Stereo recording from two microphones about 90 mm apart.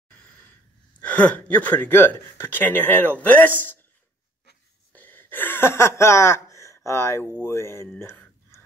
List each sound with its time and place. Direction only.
1.0 s speech: 15° left (ahead or behind)
4.9 s a sound: 20° left (ahead or behind)
7.4 s speech: 30° left (ahead or behind)